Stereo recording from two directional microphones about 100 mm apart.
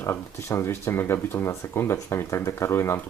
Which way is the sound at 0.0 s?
25° left (ahead or behind).